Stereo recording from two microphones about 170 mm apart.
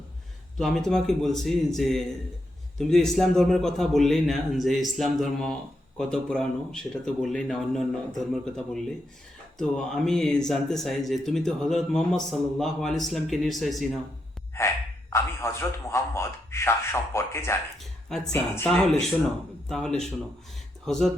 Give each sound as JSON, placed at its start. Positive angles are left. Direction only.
{"t": 0.5, "sound": "speech", "side_deg": 0}
{"t": 14.5, "sound": "a sound", "side_deg": 15}
{"t": 15.1, "sound": "a man's voice", "side_deg": 15}
{"t": 19.6, "sound": "speech", "side_deg": 5}